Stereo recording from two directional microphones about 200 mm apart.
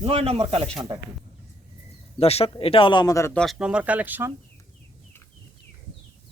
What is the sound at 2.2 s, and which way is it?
A man's voice, 30° left (ahead or behind).